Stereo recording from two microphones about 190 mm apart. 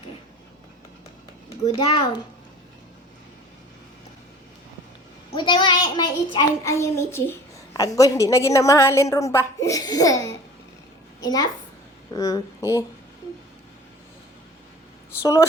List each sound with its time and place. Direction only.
1.6 s a child's voice: 30° left (ahead or behind)
5.3 s a woman's voice: 25° left (ahead or behind)
6.3 s a child's voice: 15° left (ahead or behind)
15.2 s a child's voice: 15° left (ahead or behind)